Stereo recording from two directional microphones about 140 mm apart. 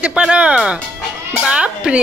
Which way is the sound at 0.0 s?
5° right (ahead or behind).